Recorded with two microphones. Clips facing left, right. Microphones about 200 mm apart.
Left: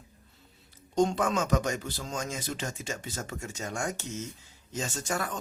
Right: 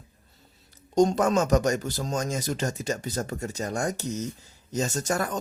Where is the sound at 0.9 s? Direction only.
40° right (ahead or behind).